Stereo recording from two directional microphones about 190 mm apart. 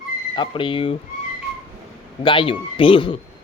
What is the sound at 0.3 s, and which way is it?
Speech, 25° left (ahead or behind).